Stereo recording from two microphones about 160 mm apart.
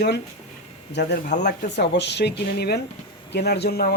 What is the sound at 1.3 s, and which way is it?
Speech, 90° left.